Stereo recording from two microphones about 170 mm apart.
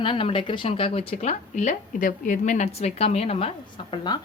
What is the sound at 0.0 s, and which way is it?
A woman's voice, 30° left (ahead or behind).